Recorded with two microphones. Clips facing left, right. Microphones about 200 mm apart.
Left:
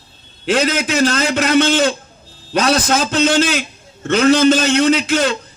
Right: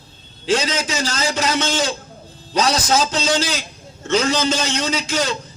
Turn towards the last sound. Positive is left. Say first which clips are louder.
# left 7 dB
turn(degrees=55)  # may be behind; listen again after turning